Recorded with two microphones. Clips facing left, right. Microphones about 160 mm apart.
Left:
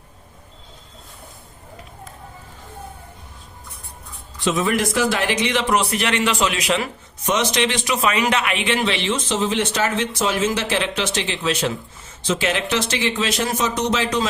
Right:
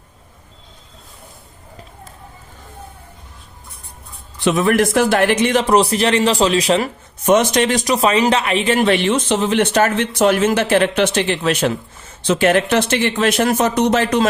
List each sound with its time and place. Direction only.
4.4 s a man's voice: 60° right (ahead or behind); by 6.8 s 35° right (ahead or behind)
7.3 s a man's voice: 50° right (ahead or behind)